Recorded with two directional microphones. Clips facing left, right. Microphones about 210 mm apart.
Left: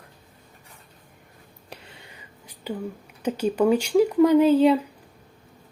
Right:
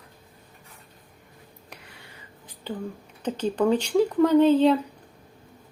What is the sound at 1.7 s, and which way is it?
Whispering, 25° left (ahead or behind).